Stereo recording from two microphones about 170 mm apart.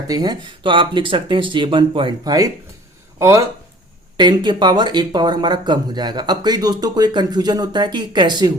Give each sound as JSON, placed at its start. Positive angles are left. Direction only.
{"t": 0.1, "sound": "speech", "side_deg": -25}
{"t": 4.2, "sound": "speech", "side_deg": -25}